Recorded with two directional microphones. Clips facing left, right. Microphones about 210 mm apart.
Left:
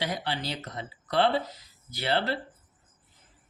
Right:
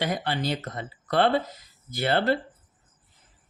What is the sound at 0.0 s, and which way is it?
Speech, 50° right (ahead or behind).